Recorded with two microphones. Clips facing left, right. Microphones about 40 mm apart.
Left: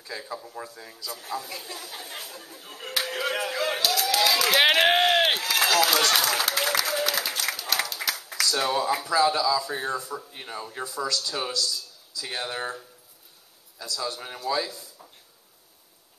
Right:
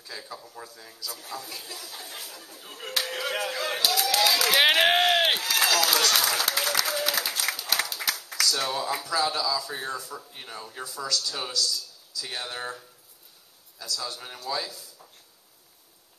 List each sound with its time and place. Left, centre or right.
0.0 s a man's voice: centre
1.7 s speech: centre
2.6 s a man's voice: centre